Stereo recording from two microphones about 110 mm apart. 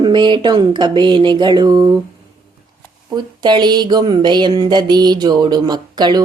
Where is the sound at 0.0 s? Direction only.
45° right (ahead or behind).